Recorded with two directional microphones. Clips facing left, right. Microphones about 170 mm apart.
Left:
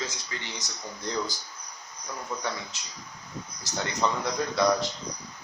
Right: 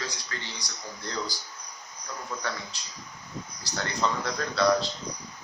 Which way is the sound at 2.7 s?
20° left (ahead or behind).